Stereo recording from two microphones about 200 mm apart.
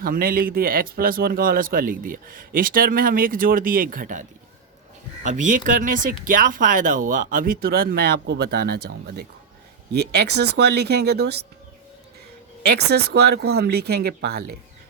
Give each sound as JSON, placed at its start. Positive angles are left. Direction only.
{"t": 0.0, "sound": "speech", "side_deg": -45}
{"t": 12.6, "sound": "speech", "side_deg": -55}